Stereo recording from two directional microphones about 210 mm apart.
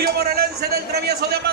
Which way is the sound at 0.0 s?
45° right (ahead or behind).